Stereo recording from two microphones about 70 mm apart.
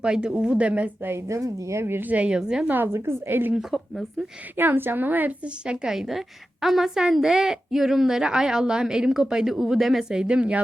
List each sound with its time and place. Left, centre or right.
0.0 s a woman's voice: centre
1.0 s a woman's voice: right
2.0 s a woman's voice: centre
2.6 s a woman's voice: right
4.5 s a woman's voice: right
5.6 s a woman's voice: centre